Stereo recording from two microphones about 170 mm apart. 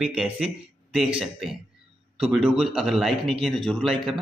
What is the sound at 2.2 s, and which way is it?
A man's voice, centre (ahead or behind).